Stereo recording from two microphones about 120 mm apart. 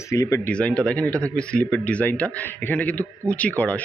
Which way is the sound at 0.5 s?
10° left (ahead or behind).